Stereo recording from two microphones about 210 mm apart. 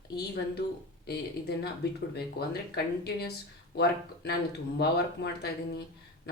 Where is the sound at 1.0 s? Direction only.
50° left (ahead or behind).